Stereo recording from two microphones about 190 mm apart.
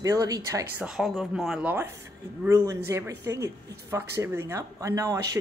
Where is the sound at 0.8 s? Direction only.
Centre (ahead or behind).